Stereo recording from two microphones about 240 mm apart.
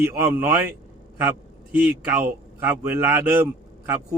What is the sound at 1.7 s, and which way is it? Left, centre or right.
Speech, centre.